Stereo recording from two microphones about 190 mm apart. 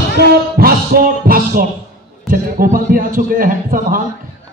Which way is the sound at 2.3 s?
45° right (ahead or behind).